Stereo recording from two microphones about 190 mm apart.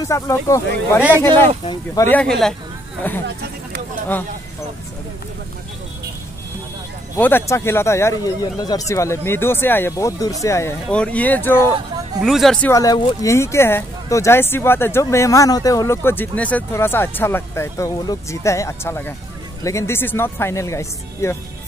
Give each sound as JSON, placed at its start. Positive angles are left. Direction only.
{"t": 0.0, "sound": "speech", "side_deg": 15}
{"t": 7.2, "sound": "speech", "side_deg": 10}
{"t": 12.2, "sound": "speech", "side_deg": 0}
{"t": 12.6, "sound": "speech", "side_deg": 15}